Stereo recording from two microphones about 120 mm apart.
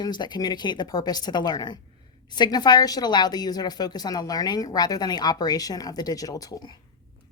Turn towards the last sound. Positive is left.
turn(degrees=35)  # may be behind; listen again after turning